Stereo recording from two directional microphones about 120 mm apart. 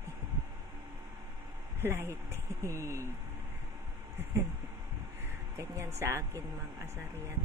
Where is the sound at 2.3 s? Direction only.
25° right (ahead or behind).